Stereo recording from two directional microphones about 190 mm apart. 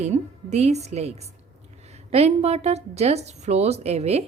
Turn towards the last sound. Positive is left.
turn(degrees=-35)  # may be behind; listen again after turning